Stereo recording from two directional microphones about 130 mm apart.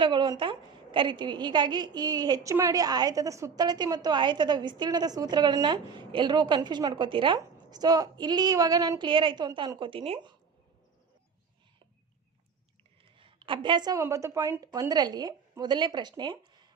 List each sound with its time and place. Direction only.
0.0 s a woman's voice: 40° right (ahead or behind)
13.1 s a sound: 40° right (ahead or behind)
14.0 s a woman's voice: 20° right (ahead or behind); by 16.6 s 35° right (ahead or behind)